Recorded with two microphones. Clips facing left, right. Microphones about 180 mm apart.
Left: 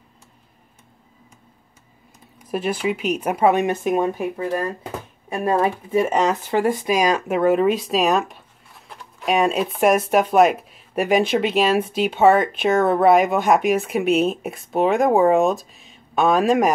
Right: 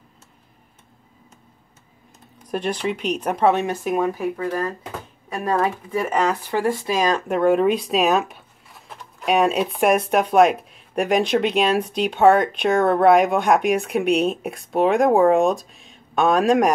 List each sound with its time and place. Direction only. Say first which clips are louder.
2.3 s speech: left 1 dB; 5° left (ahead or behind)